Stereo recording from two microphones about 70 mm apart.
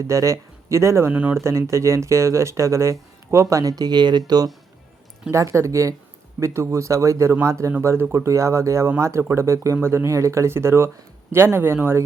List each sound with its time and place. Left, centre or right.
0.1 s speech: right
4.3 s speech: right
5.3 s speech: right